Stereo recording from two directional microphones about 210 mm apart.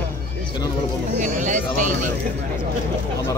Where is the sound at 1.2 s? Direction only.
35° right (ahead or behind).